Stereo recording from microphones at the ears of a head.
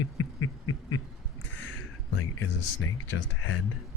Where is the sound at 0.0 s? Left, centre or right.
Left.